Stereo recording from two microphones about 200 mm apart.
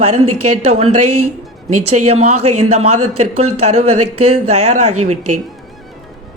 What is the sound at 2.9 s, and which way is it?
Speech, 90° right.